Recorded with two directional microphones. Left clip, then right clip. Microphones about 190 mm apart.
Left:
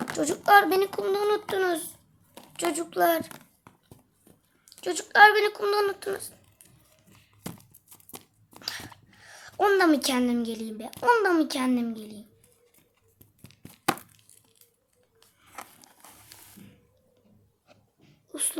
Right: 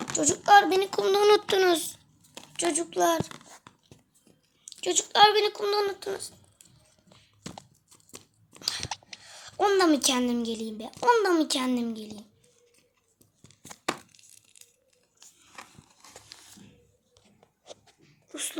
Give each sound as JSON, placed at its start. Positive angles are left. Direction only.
{"t": 0.0, "sound": "speech", "side_deg": 0}
{"t": 0.9, "sound": "a child's voice", "side_deg": -15}
{"t": 2.6, "sound": "a woman's voice", "side_deg": 0}
{"t": 4.7, "sound": "a woman's voice", "side_deg": -5}
{"t": 9.2, "sound": "a woman's voice", "side_deg": 0}
{"t": 16.3, "sound": "a sound", "side_deg": 5}
{"t": 18.3, "sound": "sneeze", "side_deg": 5}